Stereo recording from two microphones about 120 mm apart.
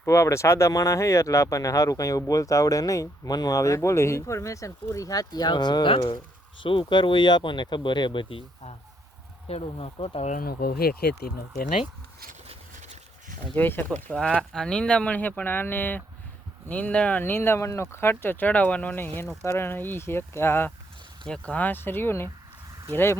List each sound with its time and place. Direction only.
0.0 s speech: 25° left (ahead or behind); by 10.2 s 55° left (ahead or behind)
13.6 s speech: 15° left (ahead or behind)
21.2 s speech: 10° left (ahead or behind)